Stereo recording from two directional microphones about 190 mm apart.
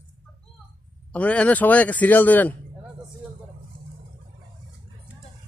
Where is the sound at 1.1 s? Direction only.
5° left (ahead or behind).